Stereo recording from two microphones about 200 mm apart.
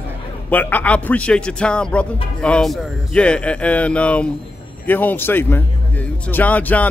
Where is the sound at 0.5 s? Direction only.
10° left (ahead or behind).